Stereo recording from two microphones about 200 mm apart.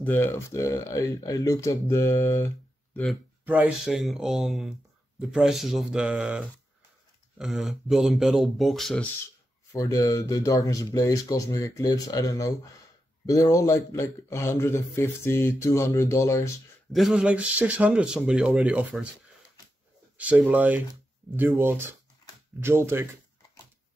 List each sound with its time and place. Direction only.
0.0 s a man's voice: 10° left (ahead or behind)
3.4 s speech: 5° right (ahead or behind)
9.7 s a man's voice: 15° left (ahead or behind)
16.9 s speech: centre (ahead or behind)
20.2 s speech: 5° right (ahead or behind)